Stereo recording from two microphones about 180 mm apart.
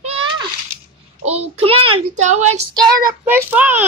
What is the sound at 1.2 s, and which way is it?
Child singing, 35° right (ahead or behind).